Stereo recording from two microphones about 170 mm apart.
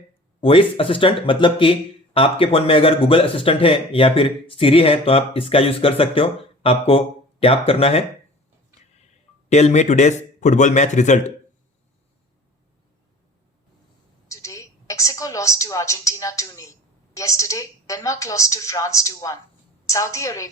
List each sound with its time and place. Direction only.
0.4 s speech: 30° left (ahead or behind)
9.5 s a man's voice: 40° left (ahead or behind)
14.3 s a woman's voice: 20° left (ahead or behind)